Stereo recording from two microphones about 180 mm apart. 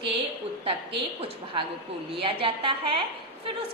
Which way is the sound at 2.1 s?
30° right (ahead or behind).